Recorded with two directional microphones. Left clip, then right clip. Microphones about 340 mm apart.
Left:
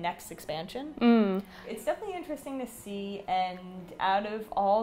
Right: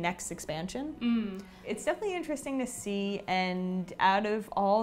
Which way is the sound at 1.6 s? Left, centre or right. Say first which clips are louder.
Right 3 dB; right.